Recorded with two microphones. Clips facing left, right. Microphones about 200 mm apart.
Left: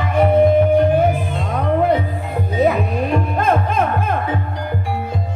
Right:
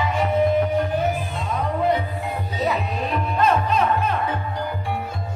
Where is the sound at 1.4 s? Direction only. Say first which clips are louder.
Left 5 dB; 55° left (ahead or behind).